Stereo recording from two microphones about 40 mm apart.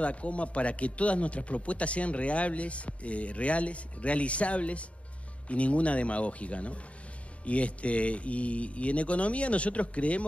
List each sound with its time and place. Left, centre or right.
0.0 s a man's voice: left